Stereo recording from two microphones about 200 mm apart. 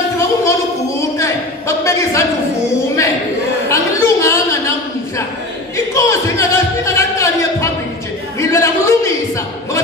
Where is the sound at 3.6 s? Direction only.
15° left (ahead or behind).